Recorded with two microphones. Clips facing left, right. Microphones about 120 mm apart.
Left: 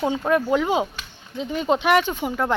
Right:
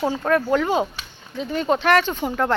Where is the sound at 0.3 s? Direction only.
15° left (ahead or behind).